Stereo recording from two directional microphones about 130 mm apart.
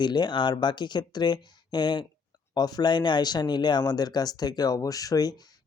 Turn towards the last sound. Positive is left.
turn(degrees=30)  # may be behind; listen again after turning